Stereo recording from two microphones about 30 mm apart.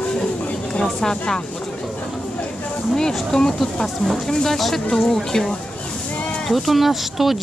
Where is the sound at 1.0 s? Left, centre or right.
Centre.